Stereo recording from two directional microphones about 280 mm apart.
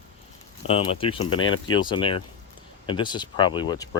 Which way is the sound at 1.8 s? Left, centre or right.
Centre.